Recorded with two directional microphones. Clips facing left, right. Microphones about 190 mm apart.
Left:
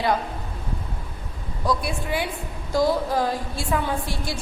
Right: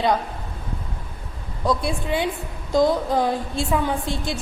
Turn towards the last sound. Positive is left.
turn(degrees=-20)  # may be behind; listen again after turning